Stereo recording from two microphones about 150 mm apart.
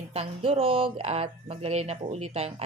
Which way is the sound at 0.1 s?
45° right (ahead or behind).